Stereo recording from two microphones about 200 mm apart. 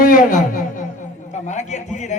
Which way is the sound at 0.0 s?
45° left (ahead or behind).